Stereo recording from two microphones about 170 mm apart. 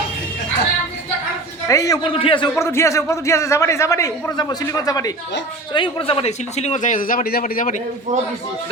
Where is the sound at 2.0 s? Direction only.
30° left (ahead or behind).